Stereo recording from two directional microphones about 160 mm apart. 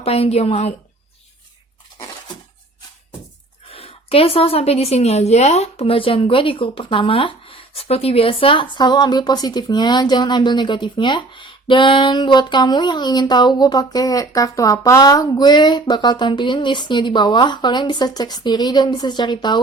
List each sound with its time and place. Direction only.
0.0 s a woman's voice: 40° left (ahead or behind)
3.7 s a woman's voice: 35° left (ahead or behind)